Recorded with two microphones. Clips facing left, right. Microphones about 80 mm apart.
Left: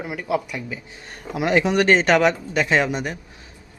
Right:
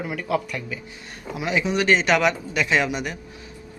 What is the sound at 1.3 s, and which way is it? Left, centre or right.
Speech, left.